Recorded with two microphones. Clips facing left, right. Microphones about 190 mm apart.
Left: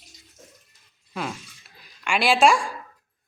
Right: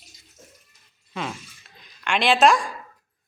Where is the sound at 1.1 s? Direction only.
5° left (ahead or behind).